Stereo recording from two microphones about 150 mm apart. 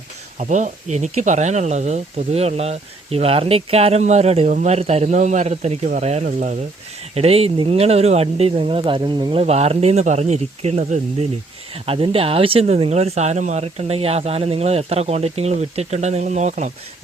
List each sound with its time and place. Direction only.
0.3 s speech: 55° right (ahead or behind)
7.1 s speech: 40° right (ahead or behind)